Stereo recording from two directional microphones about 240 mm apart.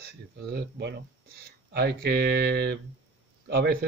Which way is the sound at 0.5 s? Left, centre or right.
Right.